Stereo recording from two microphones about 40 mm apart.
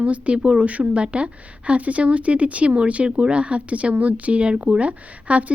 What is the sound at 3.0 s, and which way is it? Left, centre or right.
A woman's voice, right.